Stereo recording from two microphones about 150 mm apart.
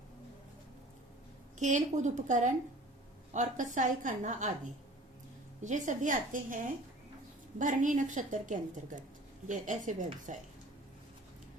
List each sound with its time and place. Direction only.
1.5 s a woman's voice: 55° right (ahead or behind)
5.6 s a woman's voice: 55° right (ahead or behind)
7.6 s a woman's voice: 60° right (ahead or behind)